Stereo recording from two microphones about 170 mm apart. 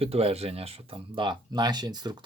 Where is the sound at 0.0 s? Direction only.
35° right (ahead or behind).